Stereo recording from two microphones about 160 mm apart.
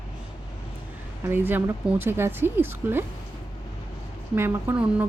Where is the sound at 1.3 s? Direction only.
10° right (ahead or behind).